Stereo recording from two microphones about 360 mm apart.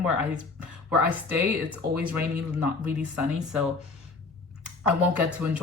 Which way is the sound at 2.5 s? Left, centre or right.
Centre.